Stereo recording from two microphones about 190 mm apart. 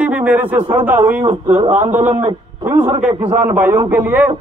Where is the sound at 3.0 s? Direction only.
10° right (ahead or behind).